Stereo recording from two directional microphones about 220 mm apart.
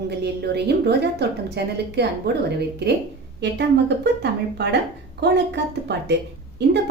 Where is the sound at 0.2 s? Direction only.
50° right (ahead or behind).